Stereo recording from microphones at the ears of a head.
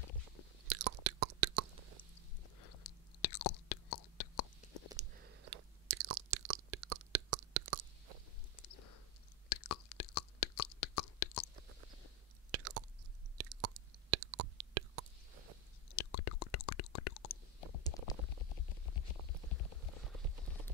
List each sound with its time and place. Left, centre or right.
0.7 s chewing: right
2.6 s whispering: left
5.1 s chewing: right
8.5 s a sound: left
12.4 s chewing: right
13.4 s a sound: right
15.9 s stomach rumble: left
19.5 s helicopter: left